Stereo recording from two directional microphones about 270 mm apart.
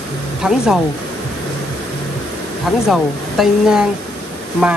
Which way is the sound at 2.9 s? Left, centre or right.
Centre.